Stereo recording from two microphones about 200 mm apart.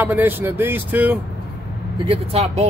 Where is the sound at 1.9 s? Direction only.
30° right (ahead or behind).